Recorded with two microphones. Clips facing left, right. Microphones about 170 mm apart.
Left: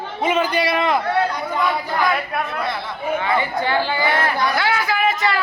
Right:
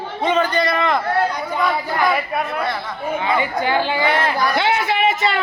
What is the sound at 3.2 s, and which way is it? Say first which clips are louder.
Speech: right 3 dB; 20° right (ahead or behind).